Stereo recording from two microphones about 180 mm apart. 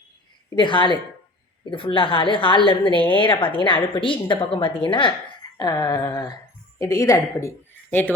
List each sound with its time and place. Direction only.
0.5 s a woman's voice: 25° left (ahead or behind); by 8.1 s 10° left (ahead or behind)